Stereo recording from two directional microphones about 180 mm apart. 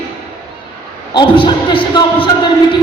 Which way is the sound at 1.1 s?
25° left (ahead or behind).